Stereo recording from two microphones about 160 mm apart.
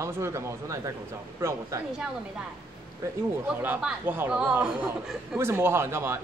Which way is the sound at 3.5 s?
10° right (ahead or behind).